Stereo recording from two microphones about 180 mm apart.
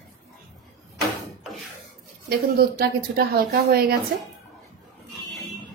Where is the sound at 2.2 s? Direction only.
60° right (ahead or behind).